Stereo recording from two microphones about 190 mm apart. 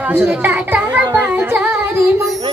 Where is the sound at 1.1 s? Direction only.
10° right (ahead or behind).